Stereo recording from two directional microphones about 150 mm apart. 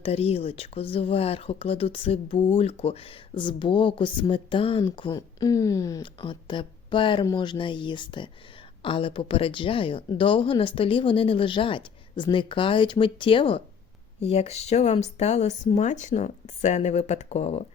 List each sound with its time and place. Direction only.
0.0 s speech: 40° left (ahead or behind); by 6.1 s 20° left (ahead or behind)
6.1 s speech: 35° left (ahead or behind)